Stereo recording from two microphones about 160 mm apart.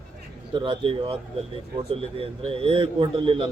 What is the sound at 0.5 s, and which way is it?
A man's voice, 30° right (ahead or behind).